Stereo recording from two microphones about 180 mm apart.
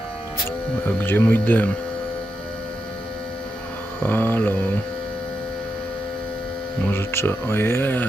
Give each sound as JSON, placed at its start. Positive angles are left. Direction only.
{"t": 0.9, "sound": "speech", "side_deg": 10}
{"t": 4.0, "sound": "speech", "side_deg": 10}
{"t": 6.9, "sound": "speech", "side_deg": 15}